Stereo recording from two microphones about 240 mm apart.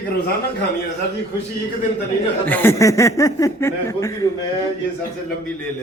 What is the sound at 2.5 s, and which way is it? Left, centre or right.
Speech, centre.